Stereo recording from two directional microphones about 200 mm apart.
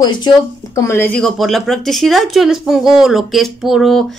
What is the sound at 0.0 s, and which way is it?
Speech, 20° left (ahead or behind).